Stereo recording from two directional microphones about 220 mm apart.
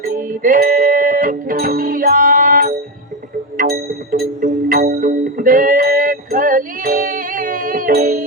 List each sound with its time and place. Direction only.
0.0 s music: 40° right (ahead or behind)